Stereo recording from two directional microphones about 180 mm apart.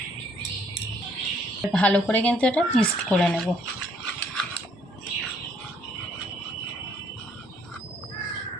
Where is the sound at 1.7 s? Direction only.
5° left (ahead or behind).